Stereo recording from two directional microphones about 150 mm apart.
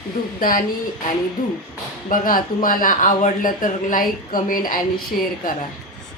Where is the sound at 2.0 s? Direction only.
65° left (ahead or behind).